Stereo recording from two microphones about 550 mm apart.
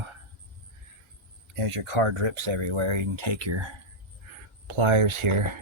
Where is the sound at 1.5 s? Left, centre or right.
Right.